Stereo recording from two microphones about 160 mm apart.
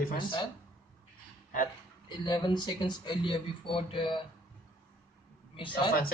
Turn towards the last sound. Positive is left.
turn(degrees=30)  # may be behind; listen again after turning